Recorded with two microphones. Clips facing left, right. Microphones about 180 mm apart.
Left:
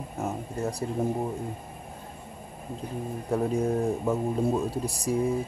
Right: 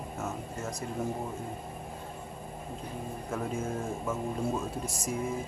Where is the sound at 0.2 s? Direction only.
35° left (ahead or behind).